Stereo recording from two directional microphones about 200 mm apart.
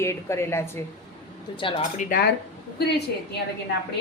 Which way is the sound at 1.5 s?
25° left (ahead or behind).